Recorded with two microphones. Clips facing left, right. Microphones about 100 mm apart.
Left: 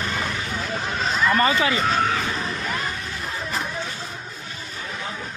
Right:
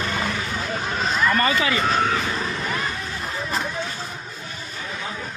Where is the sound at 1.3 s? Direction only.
20° left (ahead or behind).